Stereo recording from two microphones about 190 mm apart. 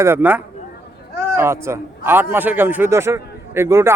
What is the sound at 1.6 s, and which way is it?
A man's voice, 15° right (ahead or behind).